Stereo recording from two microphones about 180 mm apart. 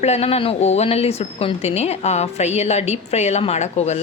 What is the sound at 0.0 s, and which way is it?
Speech, 35° left (ahead or behind).